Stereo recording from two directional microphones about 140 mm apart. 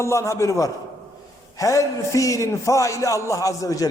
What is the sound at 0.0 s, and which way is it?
A man's voice, 20° left (ahead or behind).